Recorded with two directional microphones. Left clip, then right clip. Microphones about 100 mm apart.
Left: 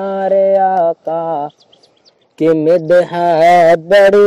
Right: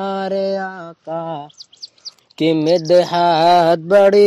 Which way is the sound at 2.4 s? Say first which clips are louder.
Left 4 dB; 20° right (ahead or behind).